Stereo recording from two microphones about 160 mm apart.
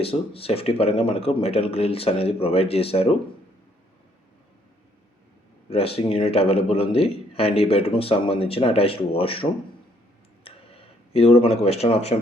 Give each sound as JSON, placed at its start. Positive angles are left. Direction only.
{"t": 0.0, "sound": "a man's voice", "side_deg": 35}
{"t": 5.6, "sound": "a man's voice", "side_deg": 35}
{"t": 10.4, "sound": "a sound", "side_deg": 35}